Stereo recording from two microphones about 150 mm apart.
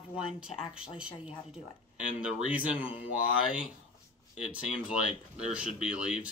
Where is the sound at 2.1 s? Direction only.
10° right (ahead or behind).